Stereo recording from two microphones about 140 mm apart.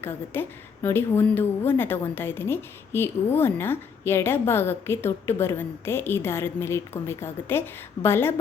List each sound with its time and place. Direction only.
0.0 s a woman's voice: 15° left (ahead or behind)